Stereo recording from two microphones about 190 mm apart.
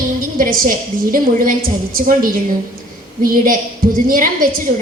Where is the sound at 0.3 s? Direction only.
45° right (ahead or behind).